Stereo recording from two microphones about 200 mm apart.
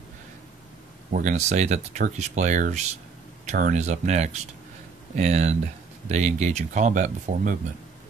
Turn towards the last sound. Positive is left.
turn(degrees=-40)  # may be behind; listen again after turning